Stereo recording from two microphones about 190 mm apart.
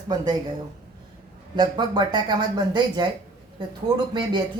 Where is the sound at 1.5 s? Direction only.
20° right (ahead or behind).